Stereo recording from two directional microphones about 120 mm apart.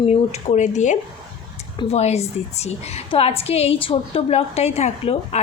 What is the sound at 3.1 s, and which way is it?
A woman's voice, 55° left (ahead or behind).